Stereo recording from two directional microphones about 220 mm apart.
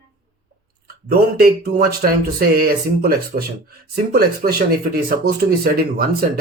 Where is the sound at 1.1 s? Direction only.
45° right (ahead or behind).